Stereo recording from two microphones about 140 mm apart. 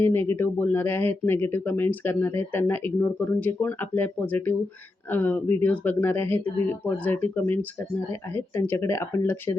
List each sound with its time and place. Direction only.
0.0 s speech: 15° left (ahead or behind)